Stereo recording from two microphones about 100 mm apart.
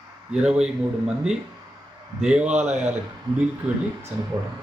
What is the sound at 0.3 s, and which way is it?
Speech, 10° right (ahead or behind).